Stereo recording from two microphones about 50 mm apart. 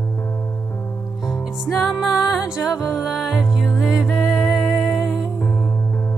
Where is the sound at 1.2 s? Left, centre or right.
Centre.